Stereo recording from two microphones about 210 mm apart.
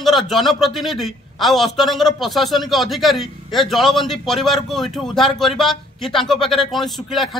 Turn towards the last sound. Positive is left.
turn(degrees=0)  # may be behind; listen again after turning